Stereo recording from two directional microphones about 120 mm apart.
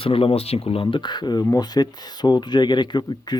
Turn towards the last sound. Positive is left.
turn(degrees=35)  # may be behind; listen again after turning